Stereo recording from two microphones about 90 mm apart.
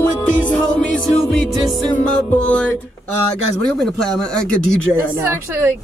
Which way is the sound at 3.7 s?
5° left (ahead or behind).